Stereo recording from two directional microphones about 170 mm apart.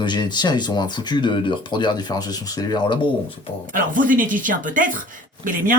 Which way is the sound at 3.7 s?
50° right (ahead or behind).